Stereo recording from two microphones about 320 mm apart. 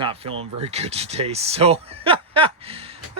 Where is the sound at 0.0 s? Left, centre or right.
Centre.